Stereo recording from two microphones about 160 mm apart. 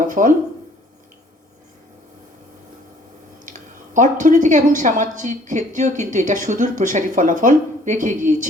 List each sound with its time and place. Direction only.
0.0 s speech: 55° right (ahead or behind)
3.9 s a woman's voice: 55° right (ahead or behind)